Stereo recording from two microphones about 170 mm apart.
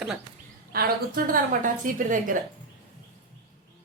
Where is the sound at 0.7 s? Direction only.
60° right (ahead or behind).